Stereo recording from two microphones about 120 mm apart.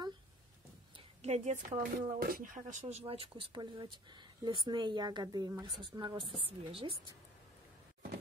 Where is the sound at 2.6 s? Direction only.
45° right (ahead or behind).